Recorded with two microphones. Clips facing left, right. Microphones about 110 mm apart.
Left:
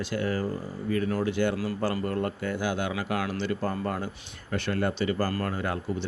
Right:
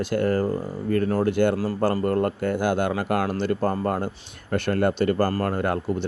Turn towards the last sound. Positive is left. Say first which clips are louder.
# right 6 dB
turn(degrees=-55)  # may be behind; listen again after turning